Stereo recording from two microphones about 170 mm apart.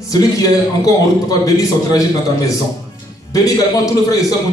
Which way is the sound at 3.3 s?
20° left (ahead or behind).